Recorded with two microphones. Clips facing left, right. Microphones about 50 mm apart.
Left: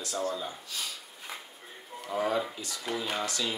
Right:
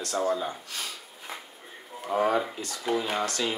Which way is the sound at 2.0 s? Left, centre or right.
Right.